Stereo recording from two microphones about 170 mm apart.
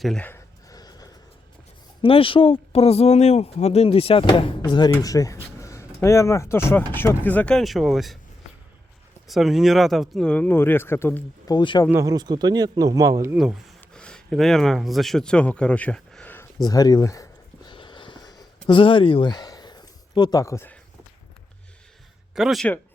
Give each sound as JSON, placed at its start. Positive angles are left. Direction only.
{"t": 0.0, "sound": "speech", "side_deg": 0}
{"t": 0.3, "sound": "a sound", "side_deg": 20}
{"t": 2.0, "sound": "speech", "side_deg": 30}
{"t": 9.2, "sound": "speech", "side_deg": 0}
{"t": 11.9, "sound": "speech", "side_deg": -15}
{"t": 13.3, "sound": "speech", "side_deg": 0}
{"t": 16.6, "sound": "a sound", "side_deg": 20}
{"t": 22.4, "sound": "speech", "side_deg": 0}